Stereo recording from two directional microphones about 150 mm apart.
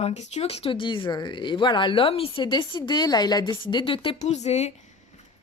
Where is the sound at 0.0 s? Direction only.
50° left (ahead or behind).